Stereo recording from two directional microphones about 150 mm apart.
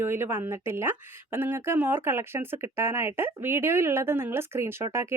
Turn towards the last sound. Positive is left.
turn(degrees=-15)  # may be behind; listen again after turning